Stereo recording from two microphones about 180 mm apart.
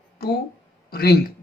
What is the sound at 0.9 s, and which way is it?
Speech, 60° left (ahead or behind).